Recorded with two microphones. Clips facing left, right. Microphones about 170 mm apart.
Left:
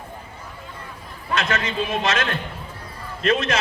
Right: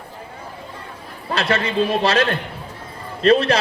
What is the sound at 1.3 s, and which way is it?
A man's voice, 35° right (ahead or behind).